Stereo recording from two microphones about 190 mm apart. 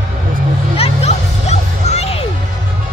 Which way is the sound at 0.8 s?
35° left (ahead or behind).